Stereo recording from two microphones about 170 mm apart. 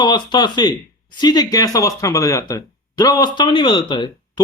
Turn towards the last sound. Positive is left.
turn(degrees=25)  # may be behind; listen again after turning